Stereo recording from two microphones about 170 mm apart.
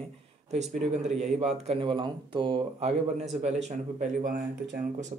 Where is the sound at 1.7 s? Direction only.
30° right (ahead or behind).